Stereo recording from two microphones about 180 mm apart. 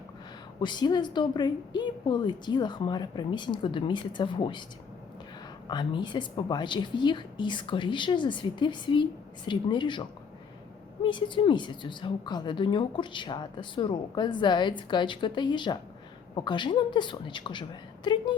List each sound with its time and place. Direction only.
0.6 s a woman's voice: 25° left (ahead or behind)
5.6 s a woman's voice: 25° left (ahead or behind)